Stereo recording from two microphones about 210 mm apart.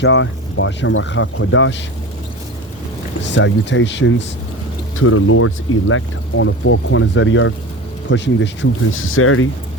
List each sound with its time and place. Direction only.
0.0 s speech: 70° left (ahead or behind)
3.2 s speech: 60° left (ahead or behind)
4.9 s speech: 90° left
5.9 s speech: 70° left (ahead or behind)
8.9 s speech: 75° left (ahead or behind)